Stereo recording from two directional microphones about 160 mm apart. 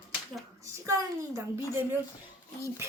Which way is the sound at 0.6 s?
20° right (ahead or behind).